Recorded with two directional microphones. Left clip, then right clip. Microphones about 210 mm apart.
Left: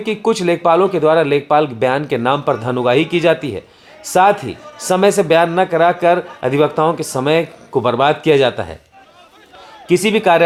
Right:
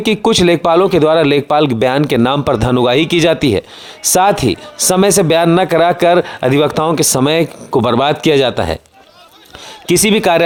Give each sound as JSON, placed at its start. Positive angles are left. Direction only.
{"t": 0.0, "sound": "speech", "side_deg": -45}
{"t": 9.8, "sound": "speech", "side_deg": -45}